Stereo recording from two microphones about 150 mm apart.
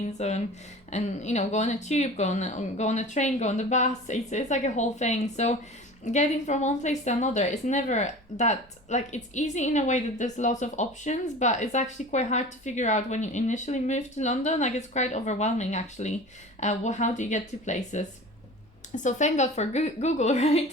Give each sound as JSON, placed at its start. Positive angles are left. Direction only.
{"t": 0.0, "sound": "a woman's voice", "side_deg": 50}
{"t": 19.0, "sound": "a woman's voice", "side_deg": 50}